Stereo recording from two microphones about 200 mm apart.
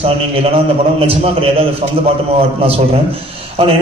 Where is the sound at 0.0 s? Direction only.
30° right (ahead or behind).